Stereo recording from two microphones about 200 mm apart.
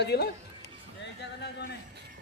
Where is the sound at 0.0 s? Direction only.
55° left (ahead or behind).